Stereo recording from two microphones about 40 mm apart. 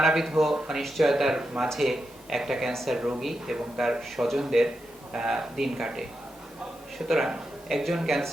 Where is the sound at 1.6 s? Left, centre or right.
Centre.